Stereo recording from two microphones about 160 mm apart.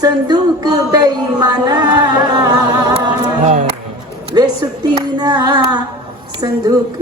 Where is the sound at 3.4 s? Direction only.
45° right (ahead or behind).